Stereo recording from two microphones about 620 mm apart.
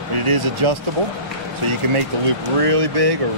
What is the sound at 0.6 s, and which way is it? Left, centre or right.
Speech, right.